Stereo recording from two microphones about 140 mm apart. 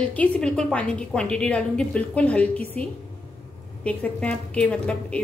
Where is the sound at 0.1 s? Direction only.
10° left (ahead or behind).